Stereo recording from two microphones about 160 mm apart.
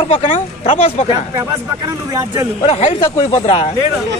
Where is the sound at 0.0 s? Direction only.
45° left (ahead or behind).